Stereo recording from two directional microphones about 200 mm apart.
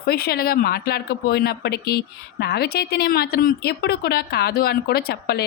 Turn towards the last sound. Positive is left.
turn(degrees=55)  # may be behind; listen again after turning